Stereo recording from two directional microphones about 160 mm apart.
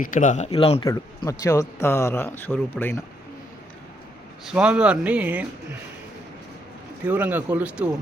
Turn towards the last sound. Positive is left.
turn(degrees=-10)  # may be behind; listen again after turning